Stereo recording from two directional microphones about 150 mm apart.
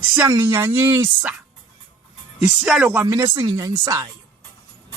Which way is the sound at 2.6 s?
10° right (ahead or behind).